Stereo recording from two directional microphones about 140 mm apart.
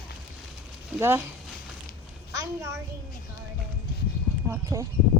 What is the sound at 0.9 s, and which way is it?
Speech, 15° right (ahead or behind).